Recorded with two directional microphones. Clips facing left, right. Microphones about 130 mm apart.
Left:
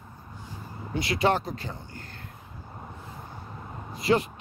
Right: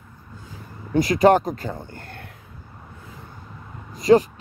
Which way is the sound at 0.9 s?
45° right (ahead or behind).